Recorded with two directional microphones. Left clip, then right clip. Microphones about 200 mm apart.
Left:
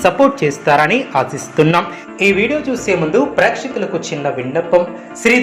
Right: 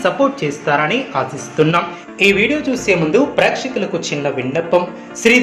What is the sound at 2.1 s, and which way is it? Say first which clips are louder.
A woman's voice: even; 5° left (ahead or behind).